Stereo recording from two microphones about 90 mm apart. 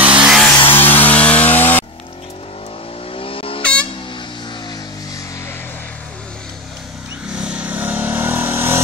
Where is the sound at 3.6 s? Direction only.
10° left (ahead or behind).